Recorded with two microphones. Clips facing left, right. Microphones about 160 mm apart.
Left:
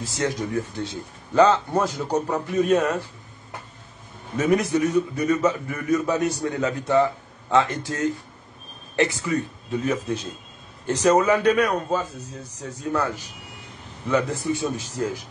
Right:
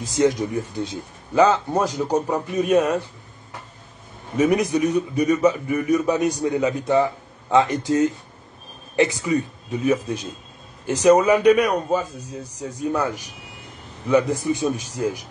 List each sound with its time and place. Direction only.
0.0 s a man's voice: 15° right (ahead or behind)
4.4 s a man's voice: 15° right (ahead or behind)